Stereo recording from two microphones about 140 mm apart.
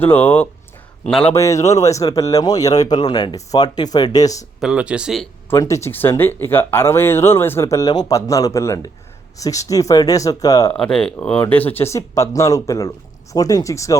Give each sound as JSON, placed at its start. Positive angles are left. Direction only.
{"t": 0.0, "sound": "speech", "side_deg": 15}
{"t": 4.6, "sound": "speech", "side_deg": -10}
{"t": 5.5, "sound": "speech", "side_deg": 20}
{"t": 10.7, "sound": "speech", "side_deg": 5}